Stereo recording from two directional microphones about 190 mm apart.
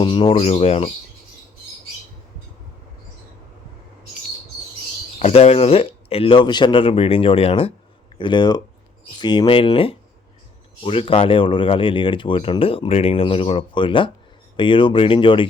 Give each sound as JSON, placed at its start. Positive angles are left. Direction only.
{"t": 0.0, "sound": "speech", "side_deg": 25}
{"t": 5.2, "sound": "speech", "side_deg": 35}